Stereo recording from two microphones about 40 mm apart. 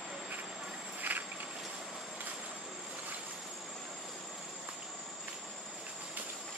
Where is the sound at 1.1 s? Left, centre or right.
Right.